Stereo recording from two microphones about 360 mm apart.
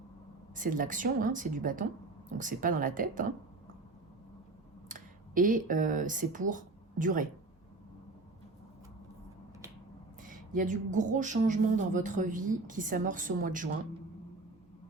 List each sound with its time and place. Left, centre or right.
0.5 s speech: right
4.9 s speech: right
10.2 s speech: right